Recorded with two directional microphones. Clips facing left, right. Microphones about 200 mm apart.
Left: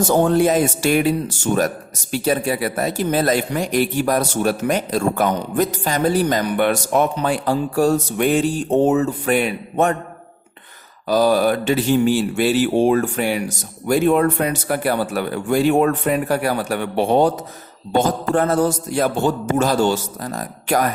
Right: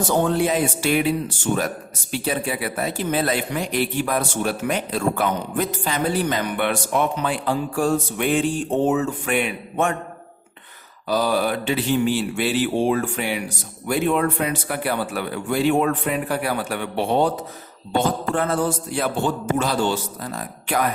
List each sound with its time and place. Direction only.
0.1 s speech: 45° left (ahead or behind)
11.1 s speech: 45° left (ahead or behind)